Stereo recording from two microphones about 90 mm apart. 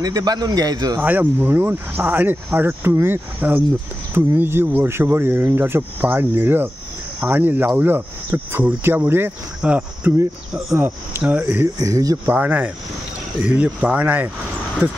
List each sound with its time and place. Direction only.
0.0 s a man's voice: 45° right (ahead or behind)
0.9 s speech: 20° right (ahead or behind)
11.8 s speech: 40° right (ahead or behind)
12.3 s speech: 20° right (ahead or behind)